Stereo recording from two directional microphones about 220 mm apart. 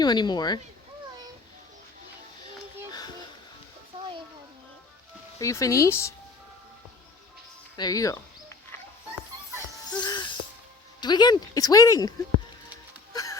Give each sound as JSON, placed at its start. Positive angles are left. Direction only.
{"t": 0.0, "sound": "speech", "side_deg": 20}
{"t": 3.9, "sound": "a sound", "side_deg": -25}
{"t": 5.4, "sound": "speech", "side_deg": 15}
{"t": 7.8, "sound": "speech", "side_deg": 15}
{"t": 9.9, "sound": "a sound", "side_deg": 20}
{"t": 11.0, "sound": "speech", "side_deg": 20}